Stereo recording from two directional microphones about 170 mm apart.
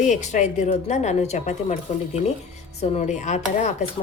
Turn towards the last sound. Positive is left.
turn(degrees=45)  # may be behind; listen again after turning